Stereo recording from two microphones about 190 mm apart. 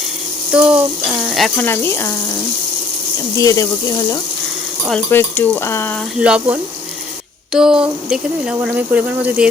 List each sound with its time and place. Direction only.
0.5 s speech: 5° right (ahead or behind); by 2.1 s 10° left (ahead or behind)
3.3 s speech: 15° left (ahead or behind)
6.1 s speech: 5° right (ahead or behind)